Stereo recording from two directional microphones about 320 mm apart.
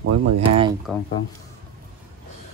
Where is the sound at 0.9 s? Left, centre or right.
Centre.